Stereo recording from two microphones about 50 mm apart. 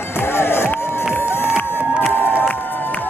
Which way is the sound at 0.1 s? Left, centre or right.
Left.